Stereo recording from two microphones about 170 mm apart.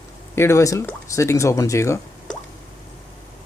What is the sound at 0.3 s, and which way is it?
Speech, 15° left (ahead or behind).